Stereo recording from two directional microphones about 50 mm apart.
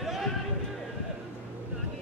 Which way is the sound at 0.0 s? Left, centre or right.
Centre.